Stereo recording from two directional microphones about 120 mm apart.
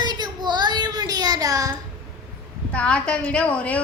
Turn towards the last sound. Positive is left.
turn(degrees=10)  # may be behind; listen again after turning